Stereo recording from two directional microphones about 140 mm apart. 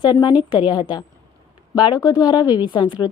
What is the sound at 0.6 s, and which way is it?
A woman's voice, 30° left (ahead or behind).